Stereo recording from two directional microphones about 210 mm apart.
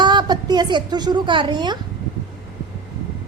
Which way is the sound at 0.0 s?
20° right (ahead or behind).